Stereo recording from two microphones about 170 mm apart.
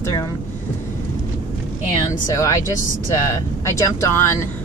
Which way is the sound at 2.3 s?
20° left (ahead or behind).